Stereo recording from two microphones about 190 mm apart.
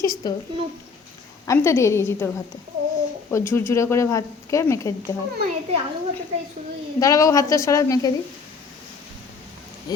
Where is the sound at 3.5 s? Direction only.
15° left (ahead or behind).